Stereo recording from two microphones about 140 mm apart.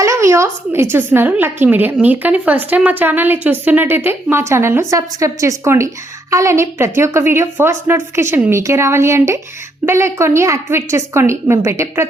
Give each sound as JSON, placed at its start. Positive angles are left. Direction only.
{"t": 0.0, "sound": "a woman's voice", "side_deg": -20}